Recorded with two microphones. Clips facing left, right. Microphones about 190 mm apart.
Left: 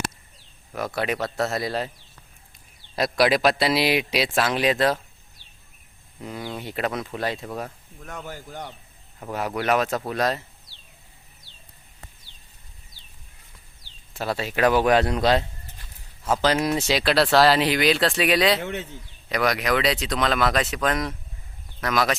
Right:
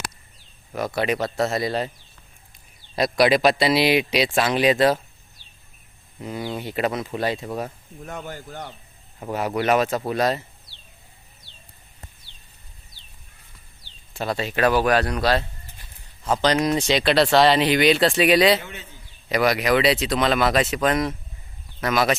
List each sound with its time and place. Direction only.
0.7 s speech: centre (ahead or behind)
2.9 s speech: centre (ahead or behind)
6.2 s speech: centre (ahead or behind)
8.3 s speech: 10° left (ahead or behind)
9.2 s speech: centre (ahead or behind)
14.1 s speech: 5° left (ahead or behind)
14.8 s speech: 25° left (ahead or behind)
16.2 s speech: 5° left (ahead or behind)
18.6 s a man's voice: 70° left (ahead or behind)
19.3 s speech: 5° right (ahead or behind)